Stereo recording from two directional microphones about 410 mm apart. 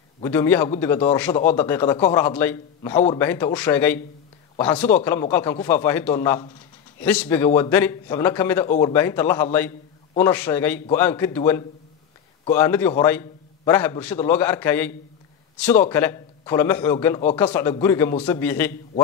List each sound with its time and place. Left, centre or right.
0.2 s a man's voice: centre
8.6 s speech: centre
8.9 s a man's voice: centre